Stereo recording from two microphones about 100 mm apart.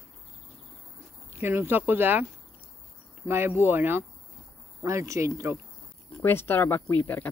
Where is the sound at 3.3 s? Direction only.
20° right (ahead or behind).